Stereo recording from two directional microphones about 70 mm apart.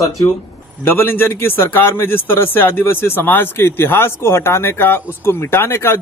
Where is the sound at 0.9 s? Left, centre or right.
Left.